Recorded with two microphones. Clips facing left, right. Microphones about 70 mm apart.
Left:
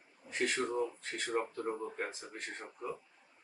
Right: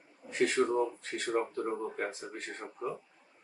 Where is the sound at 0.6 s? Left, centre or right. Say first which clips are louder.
Right 6 dB; centre.